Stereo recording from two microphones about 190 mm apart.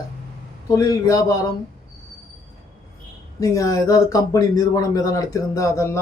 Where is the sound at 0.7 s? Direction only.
20° left (ahead or behind).